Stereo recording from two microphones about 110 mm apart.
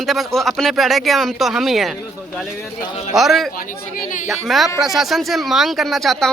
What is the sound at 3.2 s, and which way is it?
Speech, centre (ahead or behind).